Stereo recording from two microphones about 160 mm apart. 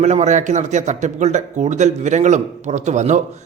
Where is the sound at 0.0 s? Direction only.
45° right (ahead or behind).